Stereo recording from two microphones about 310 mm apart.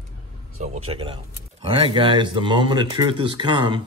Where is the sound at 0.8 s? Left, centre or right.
Centre.